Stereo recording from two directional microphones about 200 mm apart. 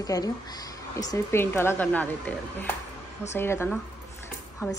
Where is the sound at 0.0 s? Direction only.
20° left (ahead or behind).